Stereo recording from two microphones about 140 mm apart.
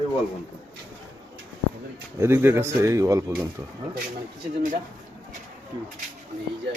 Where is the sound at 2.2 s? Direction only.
15° right (ahead or behind).